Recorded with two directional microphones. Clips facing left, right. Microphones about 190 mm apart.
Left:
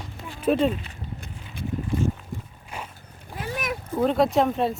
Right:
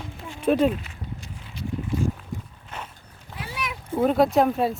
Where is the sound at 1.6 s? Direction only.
55° left (ahead or behind).